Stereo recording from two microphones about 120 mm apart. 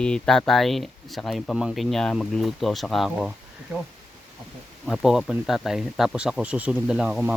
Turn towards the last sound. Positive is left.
turn(degrees=-5)  # may be behind; listen again after turning